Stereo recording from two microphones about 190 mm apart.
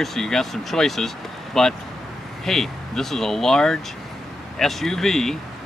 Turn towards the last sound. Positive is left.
turn(degrees=0)  # may be behind; listen again after turning